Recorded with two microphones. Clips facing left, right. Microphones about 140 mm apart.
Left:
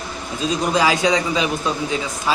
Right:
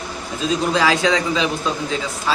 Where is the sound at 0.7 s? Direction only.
15° left (ahead or behind).